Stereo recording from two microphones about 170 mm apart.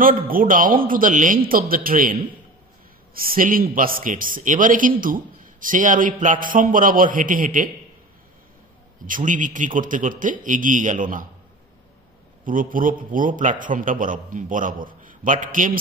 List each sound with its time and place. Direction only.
0.3 s a man's voice: 55° right (ahead or behind)
3.2 s a man's voice: 55° right (ahead or behind)
9.0 s a man's voice: 50° right (ahead or behind)
12.4 s a man's voice: 55° right (ahead or behind)